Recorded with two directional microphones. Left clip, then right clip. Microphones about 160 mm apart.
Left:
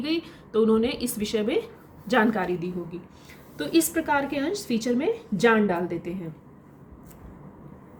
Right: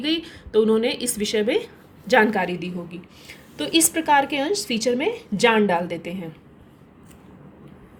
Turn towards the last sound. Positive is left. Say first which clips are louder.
# right 4 dB
turn(degrees=-40)  # may be behind; listen again after turning